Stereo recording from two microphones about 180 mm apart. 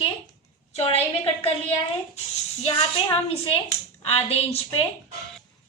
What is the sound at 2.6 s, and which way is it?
A woman's voice, 30° left (ahead or behind).